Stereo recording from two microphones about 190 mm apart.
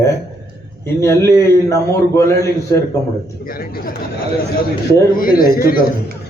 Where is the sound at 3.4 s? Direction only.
50° left (ahead or behind).